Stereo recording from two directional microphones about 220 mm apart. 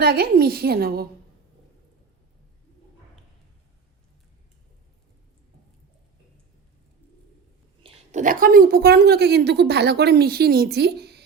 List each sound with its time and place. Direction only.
0.0 s a woman's voice: 45° right (ahead or behind)
7.9 s a woman's voice: 35° right (ahead or behind)